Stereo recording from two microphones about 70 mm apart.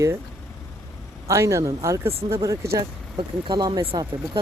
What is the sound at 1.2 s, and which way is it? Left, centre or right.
Speech, right.